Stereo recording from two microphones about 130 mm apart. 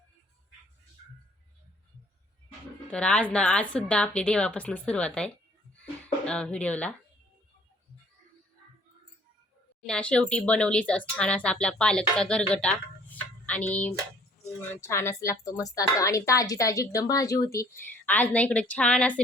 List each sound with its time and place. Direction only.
2.9 s speech: 10° left (ahead or behind)
9.8 s speech: 5° left (ahead or behind)
12.6 s a sound: 10° left (ahead or behind)
14.7 s a woman's voice: 20° left (ahead or behind)